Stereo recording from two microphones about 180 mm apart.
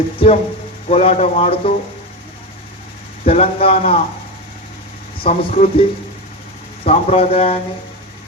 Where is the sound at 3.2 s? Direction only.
35° left (ahead or behind).